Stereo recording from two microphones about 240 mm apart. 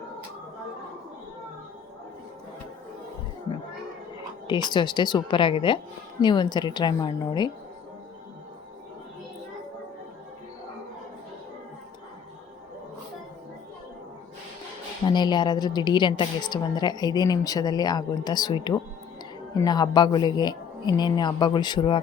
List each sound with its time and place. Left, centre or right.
4.4 s a woman's voice: centre
15.1 s a woman's voice: centre